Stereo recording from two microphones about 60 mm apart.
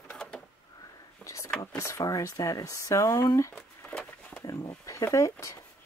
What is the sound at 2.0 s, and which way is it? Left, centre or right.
Speech, left.